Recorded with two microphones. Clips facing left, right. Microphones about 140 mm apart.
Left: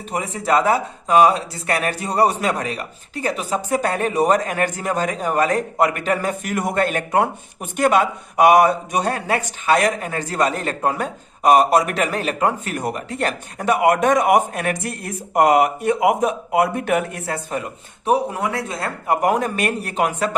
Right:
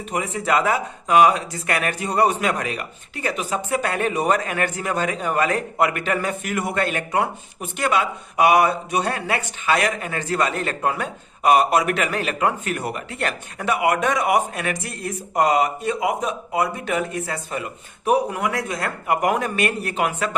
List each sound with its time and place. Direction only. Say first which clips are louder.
0.1 s speech: left 2 dB; 35° left (ahead or behind); by 17.6 s 55° left (ahead or behind)
17.6 s speech: even; 30° left (ahead or behind)